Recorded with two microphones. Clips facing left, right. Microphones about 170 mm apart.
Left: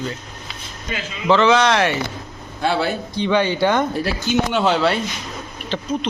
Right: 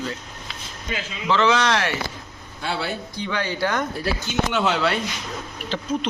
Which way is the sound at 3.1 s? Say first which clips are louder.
Left 8 dB; 25° left (ahead or behind).